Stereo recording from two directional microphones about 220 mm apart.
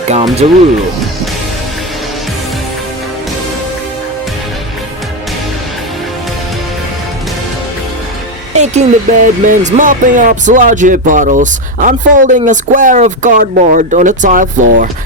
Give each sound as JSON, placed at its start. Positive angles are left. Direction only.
{"t": 0.4, "sound": "speech", "side_deg": -30}
{"t": 8.5, "sound": "speech", "side_deg": -30}